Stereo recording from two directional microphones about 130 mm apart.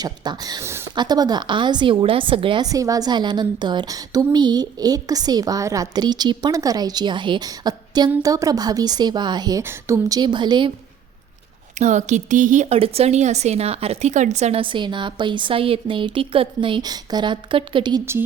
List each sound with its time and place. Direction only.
0.0 s a woman's voice: 30° right (ahead or behind)
2.6 s a woman's voice: 25° right (ahead or behind)
11.8 s a woman's voice: 65° right (ahead or behind)
14.6 s a woman's voice: 40° right (ahead or behind)
18.0 s speech: 20° right (ahead or behind)